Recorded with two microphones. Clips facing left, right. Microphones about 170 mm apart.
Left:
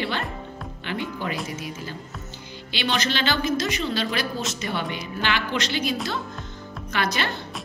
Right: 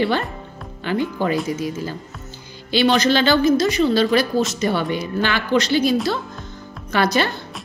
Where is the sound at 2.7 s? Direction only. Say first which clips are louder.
Right 10 dB; 40° right (ahead or behind).